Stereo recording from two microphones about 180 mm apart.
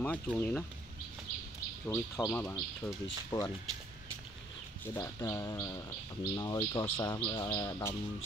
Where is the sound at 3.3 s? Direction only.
25° left (ahead or behind).